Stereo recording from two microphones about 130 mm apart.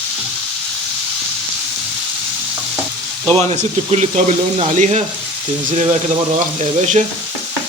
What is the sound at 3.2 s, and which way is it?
Speech, 45° right (ahead or behind).